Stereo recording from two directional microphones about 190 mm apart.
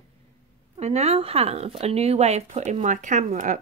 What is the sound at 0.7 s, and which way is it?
Speech, 35° right (ahead or behind).